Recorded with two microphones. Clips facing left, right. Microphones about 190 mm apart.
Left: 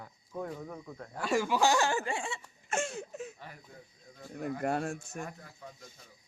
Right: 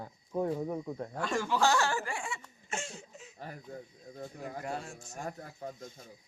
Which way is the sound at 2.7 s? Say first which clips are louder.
Left 6 dB; 55° left (ahead or behind).